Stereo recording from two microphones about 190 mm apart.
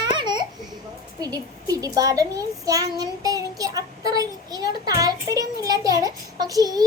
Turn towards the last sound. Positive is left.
turn(degrees=-20)  # may be behind; listen again after turning